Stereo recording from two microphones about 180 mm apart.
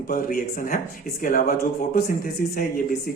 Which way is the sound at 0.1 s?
50° left (ahead or behind).